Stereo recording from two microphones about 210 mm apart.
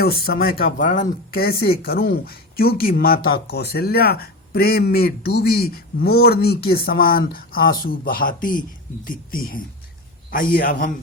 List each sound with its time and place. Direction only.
0.0 s speech: 45° left (ahead or behind)